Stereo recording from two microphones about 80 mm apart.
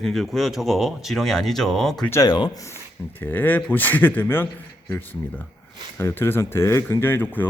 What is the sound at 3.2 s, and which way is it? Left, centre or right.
Speech, left.